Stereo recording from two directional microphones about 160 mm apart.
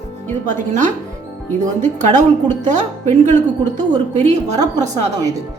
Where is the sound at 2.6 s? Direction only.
50° right (ahead or behind).